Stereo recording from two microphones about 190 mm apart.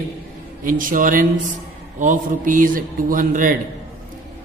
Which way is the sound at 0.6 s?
45° right (ahead or behind).